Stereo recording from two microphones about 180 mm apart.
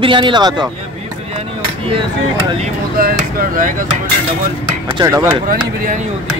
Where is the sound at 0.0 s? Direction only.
25° right (ahead or behind).